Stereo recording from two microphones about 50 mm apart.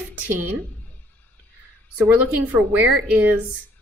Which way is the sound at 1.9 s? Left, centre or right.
Right.